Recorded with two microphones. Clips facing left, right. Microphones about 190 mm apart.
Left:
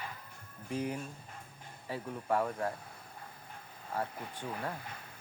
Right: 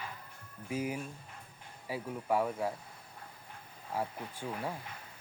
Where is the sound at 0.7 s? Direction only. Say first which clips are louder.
Even; 5° right (ahead or behind).